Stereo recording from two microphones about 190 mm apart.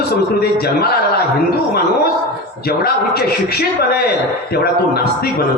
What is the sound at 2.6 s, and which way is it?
A man's voice, 55° left (ahead or behind).